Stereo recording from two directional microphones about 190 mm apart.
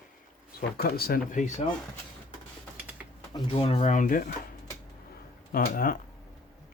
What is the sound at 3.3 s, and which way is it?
Speech, 30° left (ahead or behind).